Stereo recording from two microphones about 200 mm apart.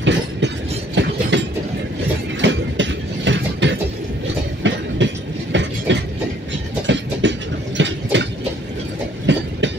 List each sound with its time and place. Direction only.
0.0 s train: 65° right (ahead or behind)